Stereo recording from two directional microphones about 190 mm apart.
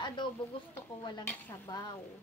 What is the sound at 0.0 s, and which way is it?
Speech, 25° left (ahead or behind).